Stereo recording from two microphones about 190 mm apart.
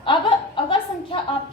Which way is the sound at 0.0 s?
25° left (ahead or behind).